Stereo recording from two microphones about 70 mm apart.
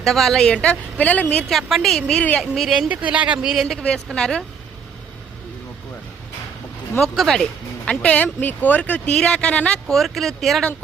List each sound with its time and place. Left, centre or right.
0.0 s a woman's voice: centre; by 1.5 s left
1.5 s speech: centre
2.9 s speech: centre
3.5 s speech: centre
3.8 s a woman's voice: centre
7.0 s speech: centre
7.9 s a woman's voice: centre
9.8 s speech: centre